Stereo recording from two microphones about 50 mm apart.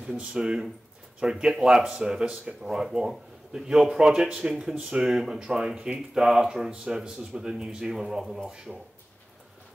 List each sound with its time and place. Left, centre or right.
0.2 s a man's voice: centre